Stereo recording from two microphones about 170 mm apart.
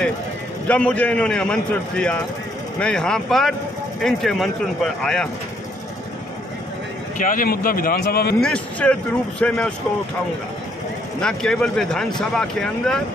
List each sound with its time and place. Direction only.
0.7 s a man's voice: 10° left (ahead or behind)
7.2 s a man's voice: 55° left (ahead or behind)
8.4 s a man's voice: 5° left (ahead or behind)
11.1 s speech: 5° left (ahead or behind)